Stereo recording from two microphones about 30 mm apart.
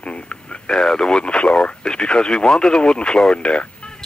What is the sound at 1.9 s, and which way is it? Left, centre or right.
Speech, left.